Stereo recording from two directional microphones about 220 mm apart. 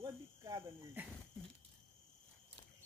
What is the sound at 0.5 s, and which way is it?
Cricket, 10° right (ahead or behind).